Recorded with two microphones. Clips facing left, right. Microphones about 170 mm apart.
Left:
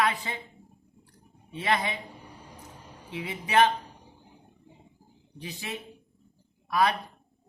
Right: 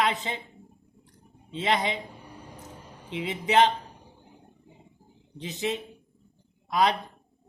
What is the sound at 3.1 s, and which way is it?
Speech, 20° right (ahead or behind).